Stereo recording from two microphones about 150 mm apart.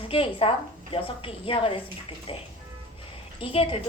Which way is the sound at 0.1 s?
35° left (ahead or behind).